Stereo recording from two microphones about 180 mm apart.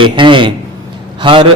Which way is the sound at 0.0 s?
25° right (ahead or behind).